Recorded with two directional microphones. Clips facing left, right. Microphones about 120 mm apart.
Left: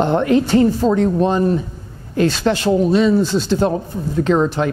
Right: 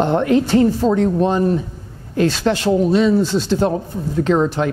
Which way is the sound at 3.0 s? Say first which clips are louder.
Even; 25° left (ahead or behind).